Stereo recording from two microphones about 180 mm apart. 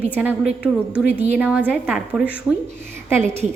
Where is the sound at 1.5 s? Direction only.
10° right (ahead or behind).